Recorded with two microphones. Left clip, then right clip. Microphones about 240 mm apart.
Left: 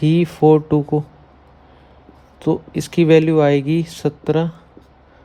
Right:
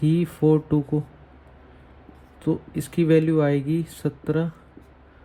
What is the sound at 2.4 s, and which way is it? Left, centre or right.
Speech, left.